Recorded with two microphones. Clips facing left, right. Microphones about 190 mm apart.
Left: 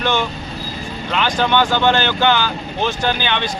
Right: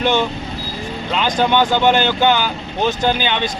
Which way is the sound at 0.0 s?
20° right (ahead or behind).